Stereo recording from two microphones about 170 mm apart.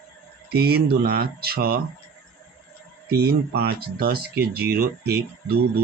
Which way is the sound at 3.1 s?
70° right (ahead or behind).